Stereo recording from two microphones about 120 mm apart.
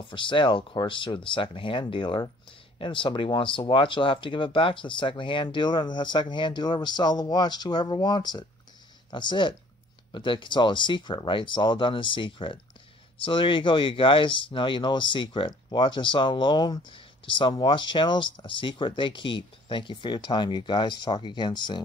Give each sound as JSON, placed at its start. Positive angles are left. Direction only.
{"t": 0.0, "sound": "speech", "side_deg": 45}